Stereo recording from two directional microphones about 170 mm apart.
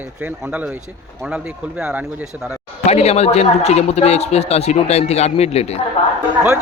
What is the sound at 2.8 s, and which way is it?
Speech, 40° left (ahead or behind).